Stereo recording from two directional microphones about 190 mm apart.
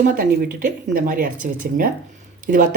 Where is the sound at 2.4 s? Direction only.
45° right (ahead or behind).